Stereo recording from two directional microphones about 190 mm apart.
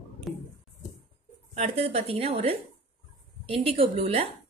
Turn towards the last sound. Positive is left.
turn(degrees=-30)  # may be behind; listen again after turning